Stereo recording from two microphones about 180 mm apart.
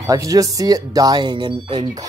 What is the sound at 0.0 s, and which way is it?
Speech, 20° right (ahead or behind).